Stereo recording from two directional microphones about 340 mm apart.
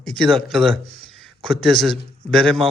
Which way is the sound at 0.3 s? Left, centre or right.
Centre.